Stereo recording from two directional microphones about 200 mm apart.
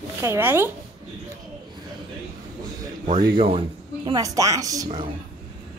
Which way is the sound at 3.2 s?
25° right (ahead or behind).